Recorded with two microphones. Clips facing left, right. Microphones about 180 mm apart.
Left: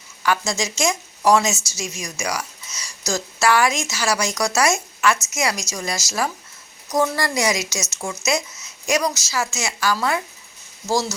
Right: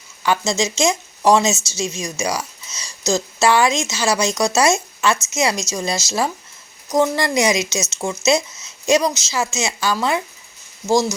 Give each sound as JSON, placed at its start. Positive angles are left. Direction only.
{"t": 0.2, "sound": "a woman's voice", "side_deg": -25}